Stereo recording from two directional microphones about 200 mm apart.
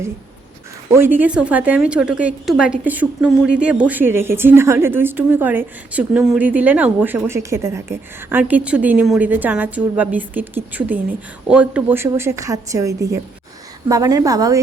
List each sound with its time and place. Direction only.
0.9 s a woman's voice: 10° right (ahead or behind)